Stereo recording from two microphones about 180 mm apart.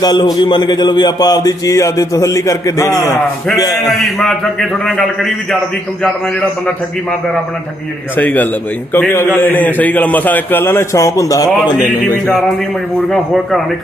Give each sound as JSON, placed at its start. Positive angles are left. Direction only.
{"t": 0.0, "sound": "speech", "side_deg": 25}
{"t": 4.0, "sound": "a man's voice", "side_deg": 0}
{"t": 8.1, "sound": "a man's voice", "side_deg": 10}
{"t": 13.1, "sound": "a man's voice", "side_deg": 0}